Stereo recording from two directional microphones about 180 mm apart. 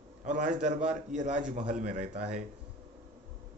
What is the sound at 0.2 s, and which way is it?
A man's voice, 45° right (ahead or behind).